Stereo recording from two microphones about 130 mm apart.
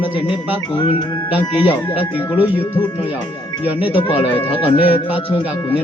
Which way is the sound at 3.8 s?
40° left (ahead or behind).